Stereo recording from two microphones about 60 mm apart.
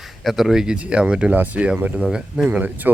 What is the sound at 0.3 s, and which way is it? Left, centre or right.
Speech, centre.